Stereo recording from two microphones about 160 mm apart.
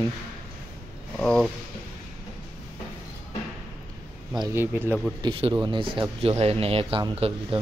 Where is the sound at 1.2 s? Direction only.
5° left (ahead or behind).